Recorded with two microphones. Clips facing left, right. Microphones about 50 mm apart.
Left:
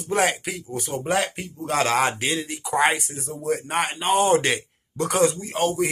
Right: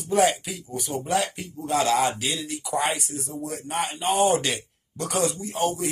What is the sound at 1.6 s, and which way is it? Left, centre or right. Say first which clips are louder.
Speech: left 1 dB; left.